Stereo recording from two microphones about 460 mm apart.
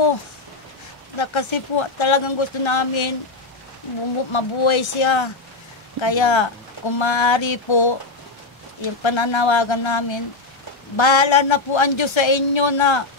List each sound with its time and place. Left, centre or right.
1.1 s speech: left
4.3 s speech: left
9.0 s speech: left